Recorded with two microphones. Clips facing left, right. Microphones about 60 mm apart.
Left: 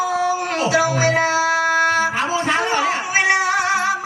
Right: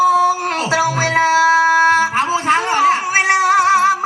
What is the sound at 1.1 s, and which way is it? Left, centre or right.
Speech, right.